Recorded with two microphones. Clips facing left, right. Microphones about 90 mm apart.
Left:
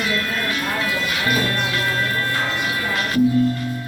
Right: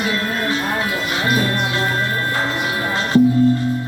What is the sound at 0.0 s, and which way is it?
Music, 30° right (ahead or behind).